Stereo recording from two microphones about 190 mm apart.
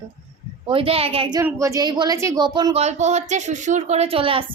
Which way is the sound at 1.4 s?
15° right (ahead or behind).